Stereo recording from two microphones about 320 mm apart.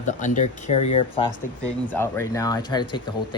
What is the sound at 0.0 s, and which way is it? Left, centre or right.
Speech, left.